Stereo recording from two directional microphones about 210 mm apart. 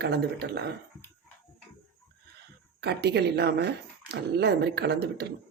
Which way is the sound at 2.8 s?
50° right (ahead or behind).